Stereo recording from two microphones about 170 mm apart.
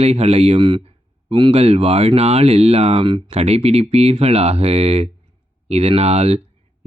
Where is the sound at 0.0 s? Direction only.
40° right (ahead or behind).